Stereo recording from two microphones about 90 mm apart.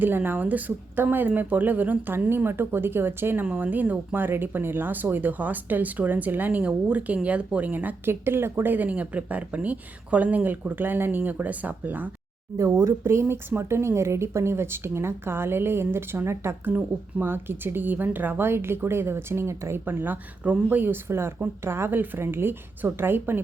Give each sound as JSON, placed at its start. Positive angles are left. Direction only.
{"t": 0.0, "sound": "speech", "side_deg": -20}
{"t": 12.5, "sound": "speech", "side_deg": -35}